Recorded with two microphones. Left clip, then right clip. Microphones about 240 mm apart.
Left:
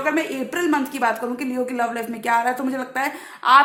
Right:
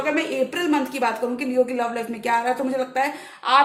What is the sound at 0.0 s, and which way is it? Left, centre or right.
A woman's voice, left.